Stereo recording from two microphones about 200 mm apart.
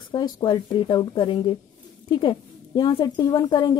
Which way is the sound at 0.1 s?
20° left (ahead or behind).